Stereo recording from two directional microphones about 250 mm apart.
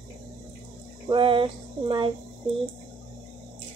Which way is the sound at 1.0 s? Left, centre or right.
Centre.